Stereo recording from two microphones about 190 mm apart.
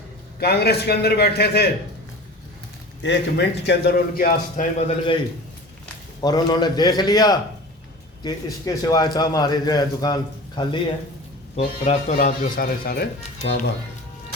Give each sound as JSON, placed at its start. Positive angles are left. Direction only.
{"t": 0.3, "sound": "a man's voice", "side_deg": 55}
{"t": 3.0, "sound": "a man's voice", "side_deg": 65}
{"t": 4.8, "sound": "a man's voice", "side_deg": 30}
{"t": 6.2, "sound": "a man's voice", "side_deg": 20}
{"t": 11.5, "sound": "speech", "side_deg": 35}